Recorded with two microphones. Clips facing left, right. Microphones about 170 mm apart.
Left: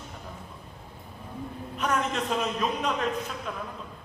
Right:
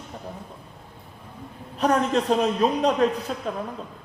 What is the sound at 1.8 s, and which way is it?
A man's voice, 35° right (ahead or behind).